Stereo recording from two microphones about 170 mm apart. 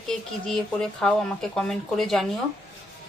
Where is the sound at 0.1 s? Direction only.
5° left (ahead or behind).